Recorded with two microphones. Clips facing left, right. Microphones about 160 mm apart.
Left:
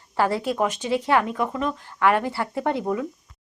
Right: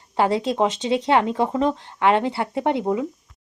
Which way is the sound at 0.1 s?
20° right (ahead or behind).